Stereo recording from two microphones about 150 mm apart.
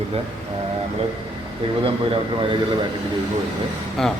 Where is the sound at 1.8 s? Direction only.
35° right (ahead or behind).